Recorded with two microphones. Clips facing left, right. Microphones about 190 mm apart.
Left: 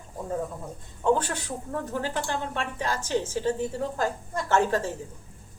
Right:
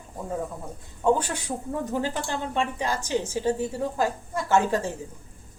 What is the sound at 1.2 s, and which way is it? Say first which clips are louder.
Speech: even; 10° right (ahead or behind).